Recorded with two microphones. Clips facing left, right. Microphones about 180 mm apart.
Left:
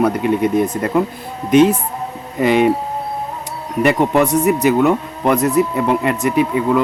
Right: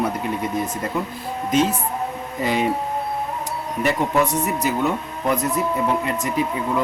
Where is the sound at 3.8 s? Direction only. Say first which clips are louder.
Left 6 dB; 65° left (ahead or behind).